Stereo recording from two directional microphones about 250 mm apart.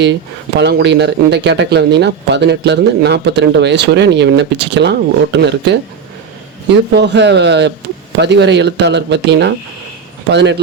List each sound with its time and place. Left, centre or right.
0.0 s speech: right
6.9 s speech: right